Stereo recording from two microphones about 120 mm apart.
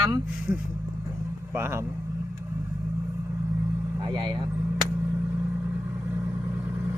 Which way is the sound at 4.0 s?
40° right (ahead or behind).